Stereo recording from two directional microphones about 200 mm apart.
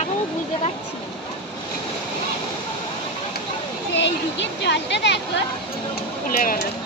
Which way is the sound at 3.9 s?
60° left (ahead or behind).